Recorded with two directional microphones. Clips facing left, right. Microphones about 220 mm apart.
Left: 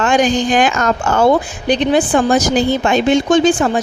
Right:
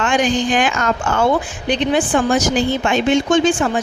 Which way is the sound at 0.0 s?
40° left (ahead or behind).